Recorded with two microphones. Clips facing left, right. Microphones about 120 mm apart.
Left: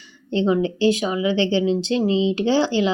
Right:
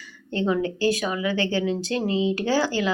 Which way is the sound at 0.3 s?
20° left (ahead or behind).